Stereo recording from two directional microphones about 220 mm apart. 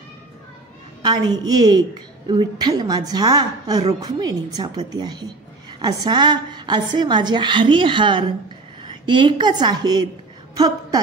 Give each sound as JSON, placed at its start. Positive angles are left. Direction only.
{"t": 1.0, "sound": "a woman's voice", "side_deg": -20}